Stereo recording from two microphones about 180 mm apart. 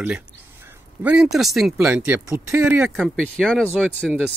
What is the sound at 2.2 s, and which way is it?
Speech, 15° right (ahead or behind).